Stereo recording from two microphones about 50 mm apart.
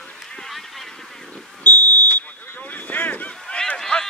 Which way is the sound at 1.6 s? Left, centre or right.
Left.